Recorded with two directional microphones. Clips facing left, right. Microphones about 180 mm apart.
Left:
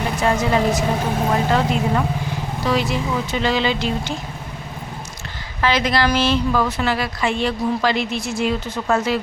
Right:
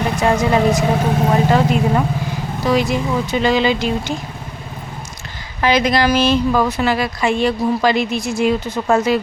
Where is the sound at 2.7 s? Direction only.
15° right (ahead or behind).